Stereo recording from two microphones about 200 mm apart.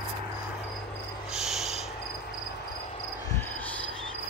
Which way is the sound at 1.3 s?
Centre (ahead or behind).